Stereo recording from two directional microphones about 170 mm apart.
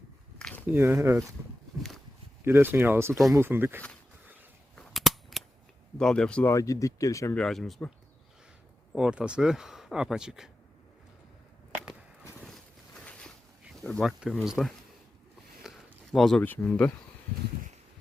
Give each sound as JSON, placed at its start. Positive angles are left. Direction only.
{"t": 0.3, "sound": "a sound", "side_deg": 5}
{"t": 0.7, "sound": "speech", "side_deg": -15}
{"t": 2.4, "sound": "speech", "side_deg": -15}
{"t": 4.7, "sound": "cap gun", "side_deg": 5}
{"t": 6.0, "sound": "speech", "side_deg": 5}
{"t": 6.5, "sound": "speech", "side_deg": 20}
{"t": 7.3, "sound": "speech", "side_deg": 5}
{"t": 9.0, "sound": "speech", "side_deg": -5}
{"t": 12.4, "sound": "boat", "side_deg": 5}
{"t": 14.0, "sound": "speech", "side_deg": 0}